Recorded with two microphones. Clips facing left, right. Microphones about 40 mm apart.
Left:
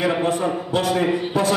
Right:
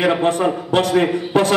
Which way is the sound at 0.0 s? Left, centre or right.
Right.